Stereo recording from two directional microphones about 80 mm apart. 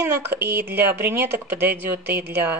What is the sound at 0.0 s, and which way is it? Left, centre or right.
Speech, right.